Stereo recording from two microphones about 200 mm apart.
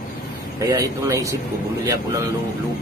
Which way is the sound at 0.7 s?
15° right (ahead or behind).